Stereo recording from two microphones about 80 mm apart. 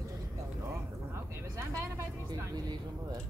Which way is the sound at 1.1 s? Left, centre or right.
Right.